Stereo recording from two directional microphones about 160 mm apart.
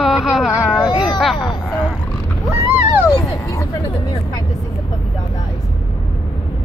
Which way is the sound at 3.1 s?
20° left (ahead or behind).